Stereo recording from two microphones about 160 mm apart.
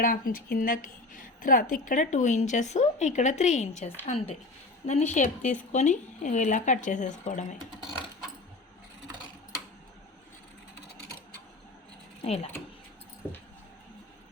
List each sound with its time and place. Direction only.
0.0 s a woman's voice: 65° left (ahead or behind)
12.2 s speech: 40° left (ahead or behind)